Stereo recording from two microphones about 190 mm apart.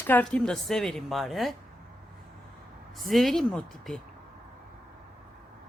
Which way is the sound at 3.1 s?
Centre (ahead or behind).